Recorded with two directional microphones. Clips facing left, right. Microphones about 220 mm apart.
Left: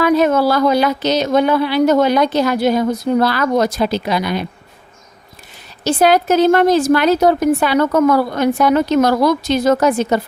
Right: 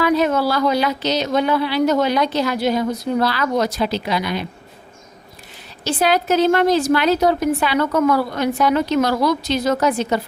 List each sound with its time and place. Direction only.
0.0 s speech: 50° left (ahead or behind)
5.8 s speech: 45° left (ahead or behind)